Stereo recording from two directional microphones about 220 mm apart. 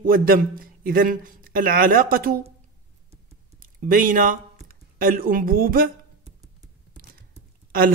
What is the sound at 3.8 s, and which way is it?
Speech, 40° right (ahead or behind).